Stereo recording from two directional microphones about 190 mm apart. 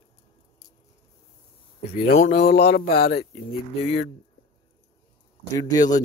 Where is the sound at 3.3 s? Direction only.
30° left (ahead or behind).